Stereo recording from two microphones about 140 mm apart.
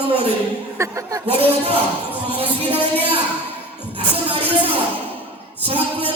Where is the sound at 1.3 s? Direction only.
45° right (ahead or behind).